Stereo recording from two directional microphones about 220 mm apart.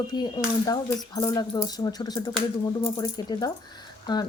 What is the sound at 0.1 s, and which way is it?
Speech, 20° left (ahead or behind).